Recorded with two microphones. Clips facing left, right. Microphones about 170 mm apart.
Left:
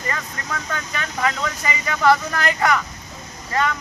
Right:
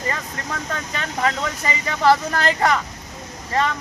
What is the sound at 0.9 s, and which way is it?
Speech, 30° right (ahead or behind).